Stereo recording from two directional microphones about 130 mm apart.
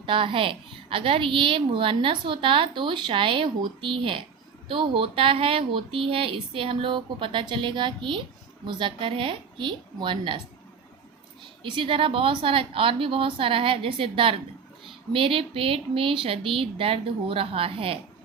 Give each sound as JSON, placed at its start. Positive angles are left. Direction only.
{"t": 0.0, "sound": "a woman's voice", "side_deg": -40}
{"t": 11.6, "sound": "a woman's voice", "side_deg": -40}